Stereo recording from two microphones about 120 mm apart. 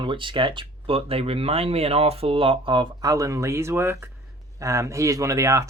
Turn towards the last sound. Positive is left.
turn(degrees=-25)  # may be behind; listen again after turning